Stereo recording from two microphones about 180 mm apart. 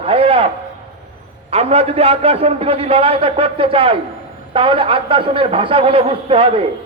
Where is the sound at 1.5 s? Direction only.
35° right (ahead or behind).